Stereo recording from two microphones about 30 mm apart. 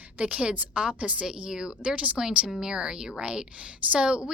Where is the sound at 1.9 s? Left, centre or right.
Right.